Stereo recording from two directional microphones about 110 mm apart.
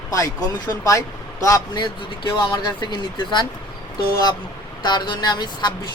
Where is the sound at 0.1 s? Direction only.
30° left (ahead or behind).